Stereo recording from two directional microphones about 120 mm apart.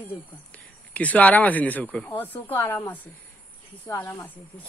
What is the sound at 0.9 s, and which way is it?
Speech, 15° left (ahead or behind).